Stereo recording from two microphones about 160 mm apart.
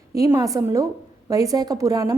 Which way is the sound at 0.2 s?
20° right (ahead or behind).